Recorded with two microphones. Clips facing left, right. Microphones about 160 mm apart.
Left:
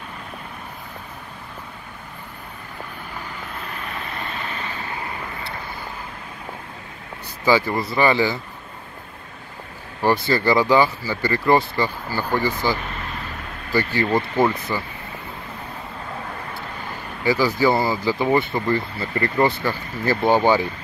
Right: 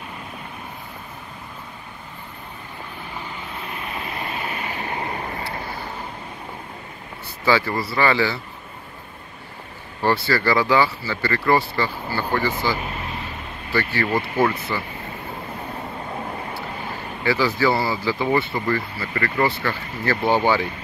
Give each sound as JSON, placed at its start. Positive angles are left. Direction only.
{"t": 4.2, "sound": "vehicle", "side_deg": -15}
{"t": 7.4, "sound": "speech", "side_deg": 15}
{"t": 10.0, "sound": "speech", "side_deg": 20}
{"t": 14.4, "sound": "speech", "side_deg": 15}
{"t": 17.2, "sound": "speech", "side_deg": 15}